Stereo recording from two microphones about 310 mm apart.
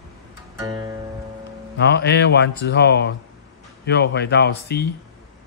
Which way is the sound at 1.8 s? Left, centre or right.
Left.